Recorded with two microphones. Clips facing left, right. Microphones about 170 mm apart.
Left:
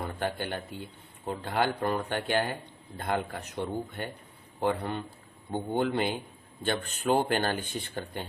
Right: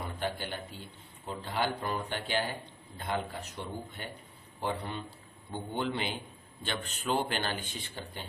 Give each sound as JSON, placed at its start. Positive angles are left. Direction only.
{"t": 0.0, "sound": "a man's voice", "side_deg": 55}